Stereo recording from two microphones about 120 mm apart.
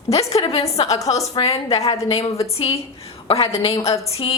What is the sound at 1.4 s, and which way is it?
A woman's voice, 60° left (ahead or behind).